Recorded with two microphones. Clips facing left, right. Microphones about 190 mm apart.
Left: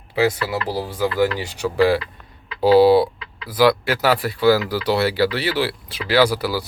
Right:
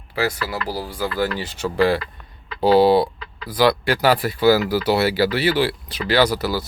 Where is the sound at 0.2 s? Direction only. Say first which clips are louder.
Left 4 dB; 25° left (ahead or behind).